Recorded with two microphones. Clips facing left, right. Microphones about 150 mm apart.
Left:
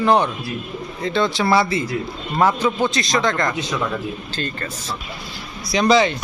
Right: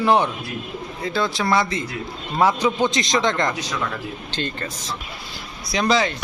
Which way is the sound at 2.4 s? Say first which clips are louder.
Left 1 dB; 10° right (ahead or behind).